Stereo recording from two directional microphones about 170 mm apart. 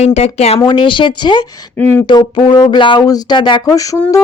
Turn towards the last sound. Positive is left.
turn(degrees=20)  # may be behind; listen again after turning